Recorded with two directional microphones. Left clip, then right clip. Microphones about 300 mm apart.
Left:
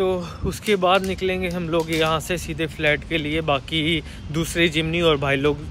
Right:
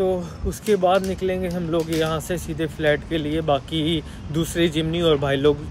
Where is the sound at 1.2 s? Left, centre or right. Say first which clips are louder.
Even; left.